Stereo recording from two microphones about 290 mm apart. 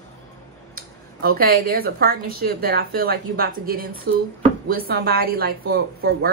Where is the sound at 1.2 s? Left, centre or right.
Right.